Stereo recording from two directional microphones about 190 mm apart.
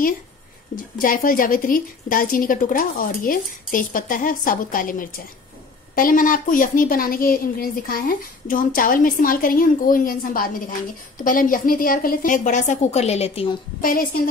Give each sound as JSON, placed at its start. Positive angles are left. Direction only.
{"t": 0.7, "sound": "a woman's voice", "side_deg": 45}
{"t": 13.7, "sound": "a woman's voice", "side_deg": 45}